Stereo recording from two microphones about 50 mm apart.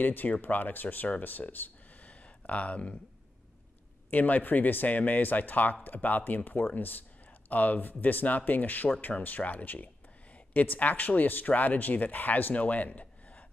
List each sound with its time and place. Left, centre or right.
0.0 s speech: left
1.2 s a sound: left
4.1 s speech: left